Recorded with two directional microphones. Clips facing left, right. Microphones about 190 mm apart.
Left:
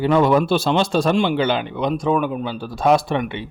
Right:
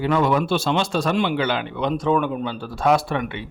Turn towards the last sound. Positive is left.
turn(degrees=25)  # may be behind; listen again after turning